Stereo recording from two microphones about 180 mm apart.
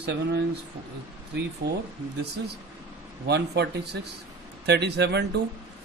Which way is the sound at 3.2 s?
65° right (ahead or behind).